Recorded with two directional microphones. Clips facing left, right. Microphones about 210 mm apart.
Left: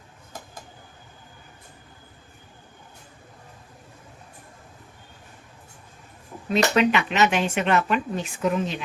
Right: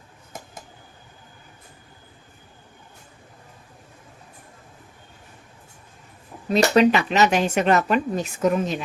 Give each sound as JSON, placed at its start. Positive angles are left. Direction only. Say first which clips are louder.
{"t": 6.5, "sound": "speech", "louder": "right 4 dB", "side_deg": -35}